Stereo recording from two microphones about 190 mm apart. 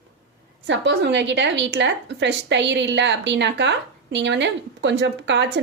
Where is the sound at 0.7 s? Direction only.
70° right (ahead or behind).